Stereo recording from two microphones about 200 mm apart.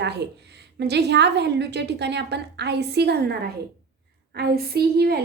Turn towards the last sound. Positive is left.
turn(degrees=-55)  # may be behind; listen again after turning